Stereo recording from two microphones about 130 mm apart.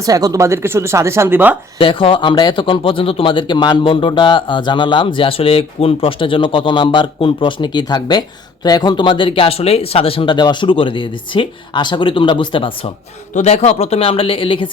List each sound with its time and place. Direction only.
0.0 s speech: 25° right (ahead or behind)
1.8 s speech: 40° left (ahead or behind)
13.3 s speech: 60° left (ahead or behind); by 14.7 s 40° left (ahead or behind)